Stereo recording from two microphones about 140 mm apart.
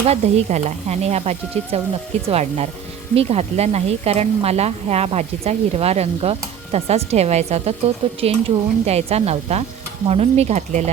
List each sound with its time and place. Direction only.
0.0 s speech: 50° right (ahead or behind)